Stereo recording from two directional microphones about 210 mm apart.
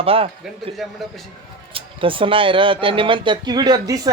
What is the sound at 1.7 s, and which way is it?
Speech, 25° right (ahead or behind).